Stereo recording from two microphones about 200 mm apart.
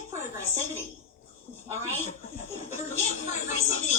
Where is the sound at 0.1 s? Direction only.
15° right (ahead or behind).